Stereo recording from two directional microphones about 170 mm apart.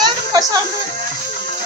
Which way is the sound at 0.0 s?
20° right (ahead or behind).